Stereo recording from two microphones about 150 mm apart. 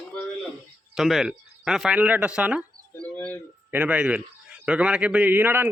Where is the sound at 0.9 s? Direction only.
Centre (ahead or behind).